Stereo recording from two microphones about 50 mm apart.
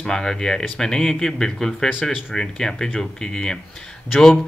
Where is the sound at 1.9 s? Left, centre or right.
Centre.